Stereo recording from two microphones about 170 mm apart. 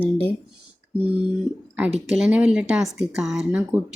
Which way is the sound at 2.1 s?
5° right (ahead or behind).